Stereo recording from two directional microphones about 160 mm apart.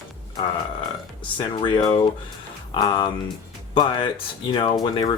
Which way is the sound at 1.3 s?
30° left (ahead or behind).